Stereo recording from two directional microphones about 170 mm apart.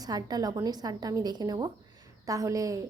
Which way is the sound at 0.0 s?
25° right (ahead or behind).